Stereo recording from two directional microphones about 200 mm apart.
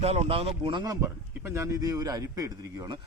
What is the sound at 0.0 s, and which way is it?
A man's voice, 30° right (ahead or behind).